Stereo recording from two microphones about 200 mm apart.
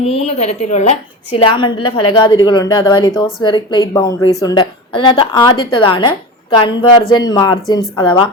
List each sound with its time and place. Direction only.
0.0 s a woman's voice: 30° left (ahead or behind)